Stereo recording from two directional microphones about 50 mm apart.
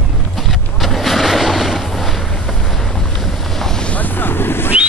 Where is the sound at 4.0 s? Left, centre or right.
Left.